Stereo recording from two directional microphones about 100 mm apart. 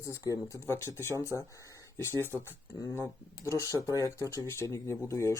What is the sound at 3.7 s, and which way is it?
Speech, 30° right (ahead or behind).